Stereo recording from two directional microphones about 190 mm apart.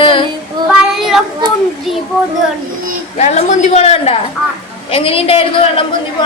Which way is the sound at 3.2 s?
35° left (ahead or behind).